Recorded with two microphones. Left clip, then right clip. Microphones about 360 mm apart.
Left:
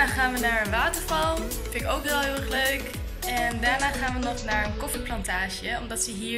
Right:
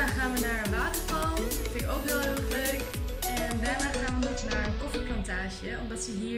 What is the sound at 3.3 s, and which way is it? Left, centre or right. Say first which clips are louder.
Music: left 7 dB; centre.